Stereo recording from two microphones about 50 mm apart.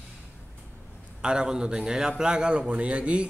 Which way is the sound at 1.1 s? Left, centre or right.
Centre.